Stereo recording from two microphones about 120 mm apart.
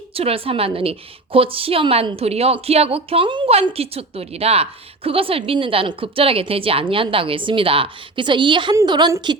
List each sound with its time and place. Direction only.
0.1 s a woman's voice: 55° right (ahead or behind); by 9.4 s 40° right (ahead or behind)